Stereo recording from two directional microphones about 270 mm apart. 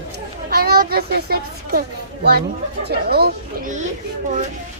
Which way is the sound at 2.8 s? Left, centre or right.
Right.